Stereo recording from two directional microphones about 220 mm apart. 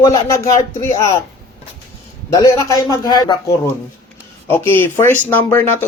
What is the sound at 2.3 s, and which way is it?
Speech, 15° left (ahead or behind).